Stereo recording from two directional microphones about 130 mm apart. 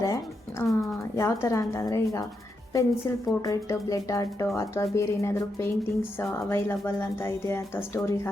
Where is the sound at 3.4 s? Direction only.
25° left (ahead or behind).